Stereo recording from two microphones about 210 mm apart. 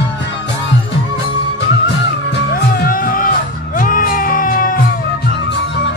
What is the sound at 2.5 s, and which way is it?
Music, 45° left (ahead or behind).